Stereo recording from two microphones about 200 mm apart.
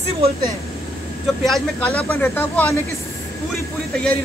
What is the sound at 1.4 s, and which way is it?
Speech, 5° left (ahead or behind).